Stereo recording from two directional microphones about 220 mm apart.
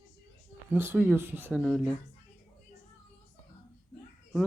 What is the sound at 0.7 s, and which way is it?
Speech, 10° right (ahead or behind).